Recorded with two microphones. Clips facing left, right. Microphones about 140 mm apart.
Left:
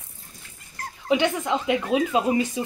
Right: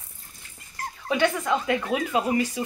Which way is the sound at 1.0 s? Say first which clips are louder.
Left 2 dB; 20° left (ahead or behind).